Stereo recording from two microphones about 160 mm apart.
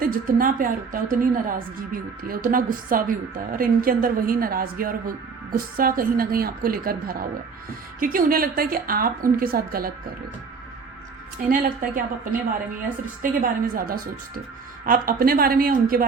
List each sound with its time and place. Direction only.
0.0 s a woman's voice: 60° right (ahead or behind)
11.4 s a woman's voice: 55° right (ahead or behind)
13.4 s a woman's voice: 65° right (ahead or behind)